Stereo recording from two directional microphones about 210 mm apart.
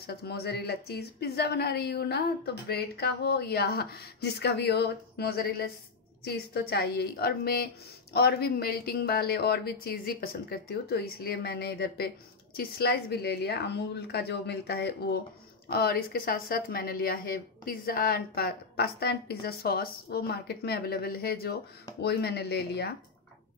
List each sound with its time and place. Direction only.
0.0 s a woman's voice: 50° left (ahead or behind)